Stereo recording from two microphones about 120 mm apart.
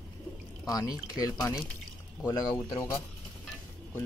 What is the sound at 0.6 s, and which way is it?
Speech, 30° left (ahead or behind).